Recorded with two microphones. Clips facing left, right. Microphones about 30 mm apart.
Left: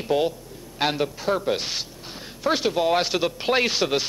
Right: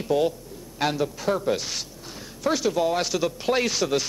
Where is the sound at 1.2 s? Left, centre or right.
Centre.